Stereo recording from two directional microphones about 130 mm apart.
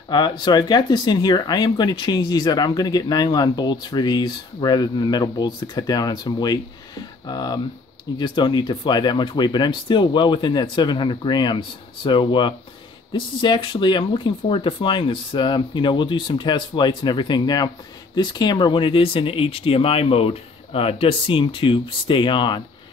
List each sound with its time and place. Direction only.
0.1 s speech: 35° left (ahead or behind)